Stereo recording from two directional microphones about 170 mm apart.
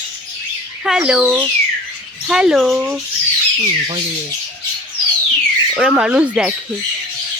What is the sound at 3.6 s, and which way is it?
Speech, 35° right (ahead or behind).